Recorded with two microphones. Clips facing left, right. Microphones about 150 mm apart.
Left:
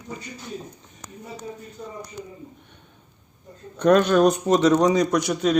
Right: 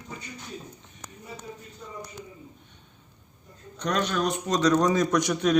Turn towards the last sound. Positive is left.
turn(degrees=10)  # may be behind; listen again after turning